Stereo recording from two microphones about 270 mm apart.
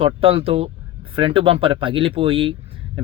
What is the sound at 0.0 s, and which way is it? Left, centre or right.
Speech, centre.